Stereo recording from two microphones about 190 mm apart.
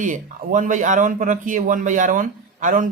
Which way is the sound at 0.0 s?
45° right (ahead or behind).